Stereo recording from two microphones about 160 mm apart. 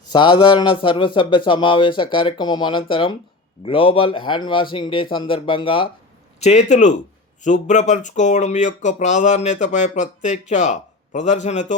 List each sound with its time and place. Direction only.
0.1 s a man's voice: 30° left (ahead or behind)
6.4 s speech: 45° left (ahead or behind)